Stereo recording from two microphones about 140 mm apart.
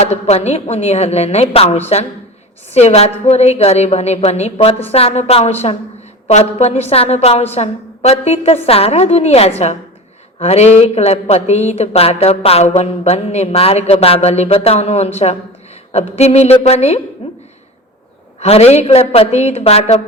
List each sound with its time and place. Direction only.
0.0 s speech: 50° left (ahead or behind)
17.2 s hiccup: 45° left (ahead or behind)
18.3 s speech: 50° left (ahead or behind)